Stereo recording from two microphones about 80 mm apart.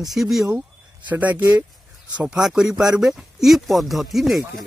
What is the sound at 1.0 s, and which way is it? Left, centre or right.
Speech, right.